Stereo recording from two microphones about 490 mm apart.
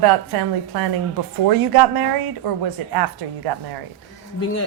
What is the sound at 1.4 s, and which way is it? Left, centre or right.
Speech, right.